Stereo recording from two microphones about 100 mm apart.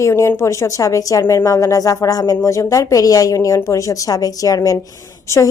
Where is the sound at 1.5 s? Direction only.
35° left (ahead or behind).